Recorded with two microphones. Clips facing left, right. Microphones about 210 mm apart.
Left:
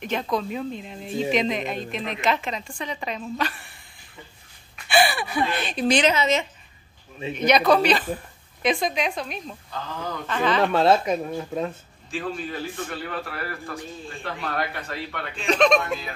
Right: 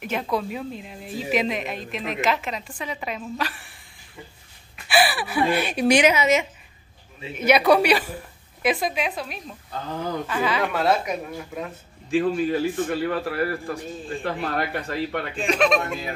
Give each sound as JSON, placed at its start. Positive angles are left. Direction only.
{"t": 0.0, "sound": "a woman's voice", "side_deg": -5}
{"t": 4.8, "sound": "a woman's voice", "side_deg": -5}
{"t": 10.6, "sound": "speech", "side_deg": 30}
{"t": 12.2, "sound": "a man's voice", "side_deg": -35}
{"t": 15.4, "sound": "speech", "side_deg": -10}